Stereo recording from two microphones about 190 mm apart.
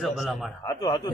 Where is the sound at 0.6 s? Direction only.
20° left (ahead or behind).